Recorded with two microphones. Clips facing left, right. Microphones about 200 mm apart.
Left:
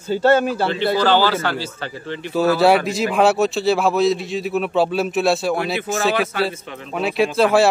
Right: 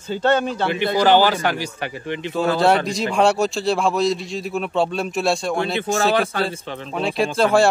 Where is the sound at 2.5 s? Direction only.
5° left (ahead or behind).